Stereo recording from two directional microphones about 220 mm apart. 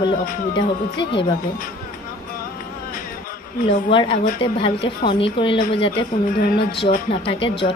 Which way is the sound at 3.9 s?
20° left (ahead or behind).